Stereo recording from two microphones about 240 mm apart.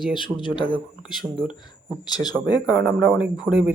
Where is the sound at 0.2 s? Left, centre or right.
Centre.